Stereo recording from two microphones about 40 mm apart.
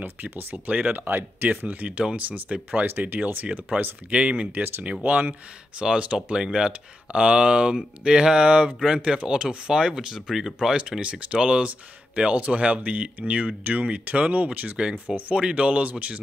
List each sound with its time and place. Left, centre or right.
0.0 s speech: right
0.7 s speech: right
0.9 s speech: right
1.6 s speech: right
4.1 s speech: right
5.0 s speech: right
5.8 s speech: right; by 10.5 s centre
10.8 s speech: right
14.8 s speech: right